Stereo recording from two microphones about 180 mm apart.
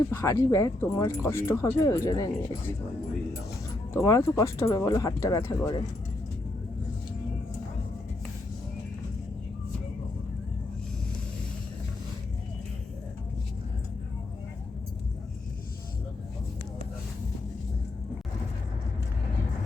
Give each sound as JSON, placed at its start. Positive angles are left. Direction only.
{"t": 0.1, "sound": "speech", "side_deg": 15}
{"t": 3.9, "sound": "speech", "side_deg": 15}